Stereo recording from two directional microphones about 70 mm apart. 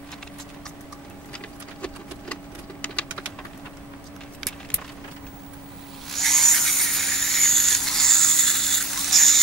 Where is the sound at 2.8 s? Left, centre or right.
Centre.